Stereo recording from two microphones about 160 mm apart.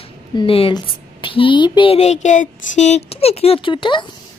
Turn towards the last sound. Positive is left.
turn(degrees=30)  # may be behind; listen again after turning